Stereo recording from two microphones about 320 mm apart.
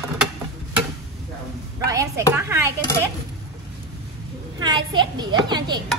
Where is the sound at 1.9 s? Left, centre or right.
Centre.